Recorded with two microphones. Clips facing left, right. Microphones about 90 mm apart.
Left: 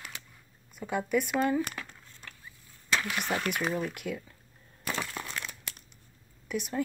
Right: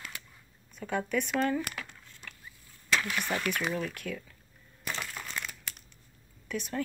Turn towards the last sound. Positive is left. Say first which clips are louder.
# left 2 dB
turn(degrees=15)  # may be behind; listen again after turning